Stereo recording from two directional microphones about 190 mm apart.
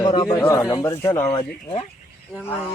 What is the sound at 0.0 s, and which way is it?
Speech, 25° left (ahead or behind).